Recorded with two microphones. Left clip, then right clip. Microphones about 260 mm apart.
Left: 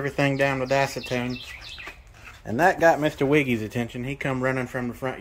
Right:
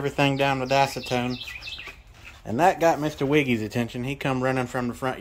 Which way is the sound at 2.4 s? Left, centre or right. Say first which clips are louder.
Left 1 dB; centre.